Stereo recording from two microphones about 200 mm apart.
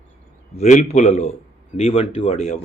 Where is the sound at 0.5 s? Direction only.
35° left (ahead or behind).